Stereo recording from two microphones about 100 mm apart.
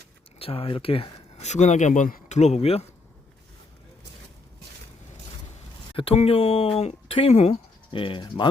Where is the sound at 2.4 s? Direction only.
90° left.